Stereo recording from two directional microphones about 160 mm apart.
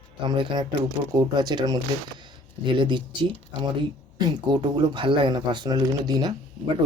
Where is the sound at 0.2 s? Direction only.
30° right (ahead or behind).